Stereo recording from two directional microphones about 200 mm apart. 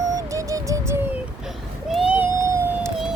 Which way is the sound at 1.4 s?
Centre (ahead or behind).